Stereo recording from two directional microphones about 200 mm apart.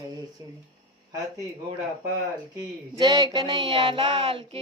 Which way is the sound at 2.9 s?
20° right (ahead or behind).